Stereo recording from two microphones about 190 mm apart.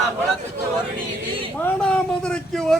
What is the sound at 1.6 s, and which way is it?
A man's voice, 5° left (ahead or behind).